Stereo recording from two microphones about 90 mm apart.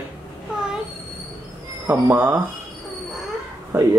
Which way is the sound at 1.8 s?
20° right (ahead or behind).